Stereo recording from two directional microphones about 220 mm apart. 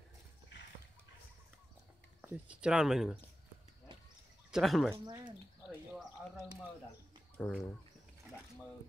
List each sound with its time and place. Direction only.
2.2 s speech: 5° right (ahead or behind)
4.5 s speech: centre (ahead or behind)
4.9 s speech: 20° right (ahead or behind)
5.7 s speech: centre (ahead or behind)